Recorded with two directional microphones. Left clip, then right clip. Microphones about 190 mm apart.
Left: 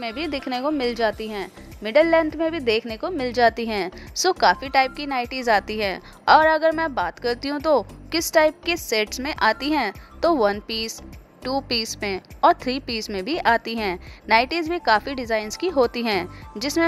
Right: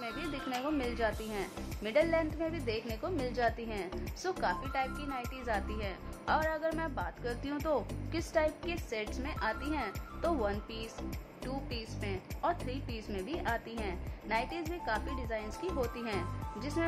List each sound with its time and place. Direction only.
0.0 s a woman's voice: 45° left (ahead or behind)